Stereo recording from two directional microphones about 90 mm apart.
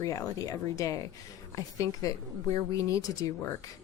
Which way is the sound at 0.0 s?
40° left (ahead or behind).